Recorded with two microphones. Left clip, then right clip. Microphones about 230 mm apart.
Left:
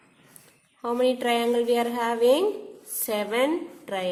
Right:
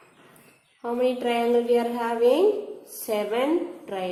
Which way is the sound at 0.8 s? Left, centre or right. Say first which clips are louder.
Left 1 dB; left.